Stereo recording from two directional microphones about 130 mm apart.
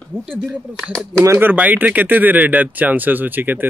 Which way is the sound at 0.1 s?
10° right (ahead or behind).